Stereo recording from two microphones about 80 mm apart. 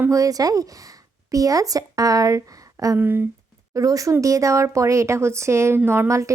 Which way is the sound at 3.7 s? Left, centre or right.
Right.